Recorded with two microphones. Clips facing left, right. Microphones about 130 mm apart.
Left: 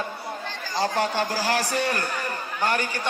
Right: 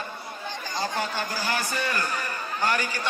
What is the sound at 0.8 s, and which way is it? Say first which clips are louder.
A man's voice: left 6 dB; 65° left (ahead or behind).